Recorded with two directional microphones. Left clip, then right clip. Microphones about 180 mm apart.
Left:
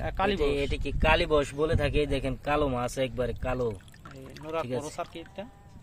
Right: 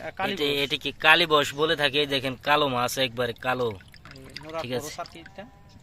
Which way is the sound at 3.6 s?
15° right (ahead or behind).